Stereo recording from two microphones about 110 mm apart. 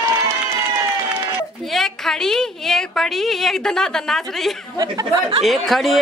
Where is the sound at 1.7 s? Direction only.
5° left (ahead or behind).